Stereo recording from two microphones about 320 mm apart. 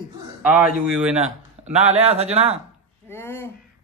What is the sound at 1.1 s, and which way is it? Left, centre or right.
Speech, centre.